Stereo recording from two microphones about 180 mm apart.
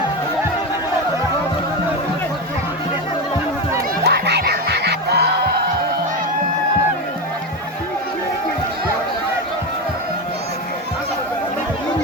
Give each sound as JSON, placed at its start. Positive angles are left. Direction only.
{"t": 4.0, "sound": "music", "side_deg": -65}